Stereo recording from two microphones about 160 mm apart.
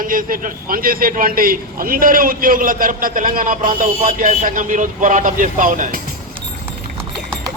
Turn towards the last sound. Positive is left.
turn(degrees=-60)  # may be behind; listen again after turning